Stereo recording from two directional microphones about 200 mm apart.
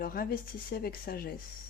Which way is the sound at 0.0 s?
50° left (ahead or behind).